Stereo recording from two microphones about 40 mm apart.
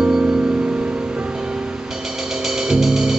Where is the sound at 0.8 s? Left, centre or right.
Right.